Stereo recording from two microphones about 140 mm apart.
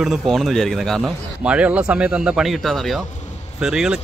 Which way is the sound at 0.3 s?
Centre (ahead or behind).